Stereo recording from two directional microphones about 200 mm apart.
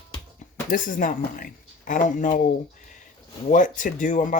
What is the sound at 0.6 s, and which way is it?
Speech, 40° left (ahead or behind).